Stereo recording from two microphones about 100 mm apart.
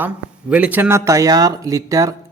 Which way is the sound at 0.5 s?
15° right (ahead or behind).